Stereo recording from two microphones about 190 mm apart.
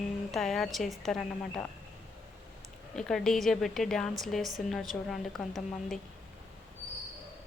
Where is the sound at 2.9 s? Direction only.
Centre (ahead or behind).